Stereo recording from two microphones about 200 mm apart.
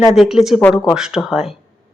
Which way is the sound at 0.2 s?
Centre (ahead or behind).